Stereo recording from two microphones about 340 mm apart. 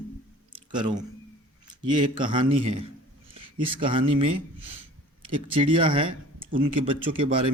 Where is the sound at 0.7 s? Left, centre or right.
Centre.